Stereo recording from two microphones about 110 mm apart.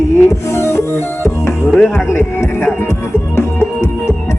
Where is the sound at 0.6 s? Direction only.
25° left (ahead or behind).